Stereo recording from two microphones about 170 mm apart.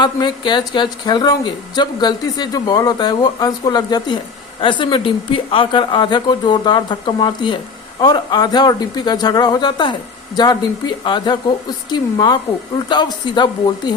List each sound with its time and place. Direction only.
0.0 s speech: 25° left (ahead or behind)